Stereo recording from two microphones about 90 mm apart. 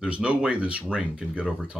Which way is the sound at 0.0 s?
15° right (ahead or behind).